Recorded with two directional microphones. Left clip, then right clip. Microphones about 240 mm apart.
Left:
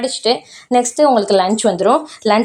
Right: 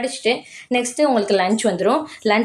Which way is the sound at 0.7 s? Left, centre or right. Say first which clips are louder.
Left 6 dB; left.